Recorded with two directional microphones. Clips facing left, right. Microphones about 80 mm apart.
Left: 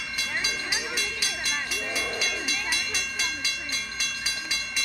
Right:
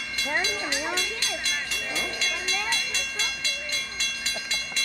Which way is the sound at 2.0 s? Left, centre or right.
Centre.